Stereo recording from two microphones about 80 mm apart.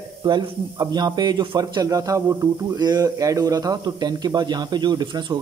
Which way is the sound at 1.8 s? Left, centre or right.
Right.